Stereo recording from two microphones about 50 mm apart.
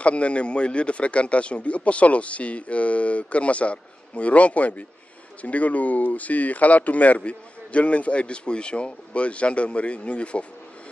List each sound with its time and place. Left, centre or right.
0.0 s speech: left